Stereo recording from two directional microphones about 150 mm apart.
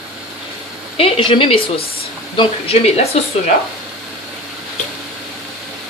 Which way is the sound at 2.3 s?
45° left (ahead or behind).